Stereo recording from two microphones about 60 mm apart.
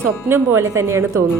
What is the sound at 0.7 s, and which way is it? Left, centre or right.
Speech, right.